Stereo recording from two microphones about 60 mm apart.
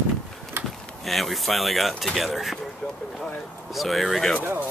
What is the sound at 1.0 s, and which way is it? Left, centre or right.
Speech, centre.